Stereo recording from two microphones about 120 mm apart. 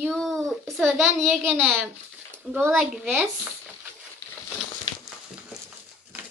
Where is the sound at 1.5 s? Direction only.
15° right (ahead or behind).